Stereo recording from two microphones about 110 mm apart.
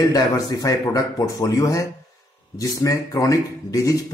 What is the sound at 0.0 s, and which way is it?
Speech, 35° left (ahead or behind).